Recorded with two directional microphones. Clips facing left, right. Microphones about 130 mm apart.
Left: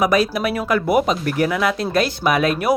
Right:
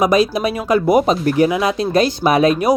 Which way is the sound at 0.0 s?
20° right (ahead or behind).